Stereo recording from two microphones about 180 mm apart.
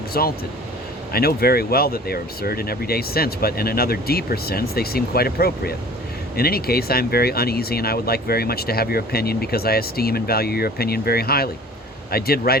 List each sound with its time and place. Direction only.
0.1 s speech: 55° left (ahead or behind)